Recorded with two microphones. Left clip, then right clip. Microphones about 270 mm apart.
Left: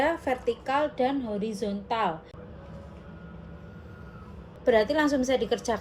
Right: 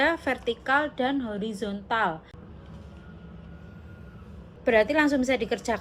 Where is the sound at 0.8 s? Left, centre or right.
Centre.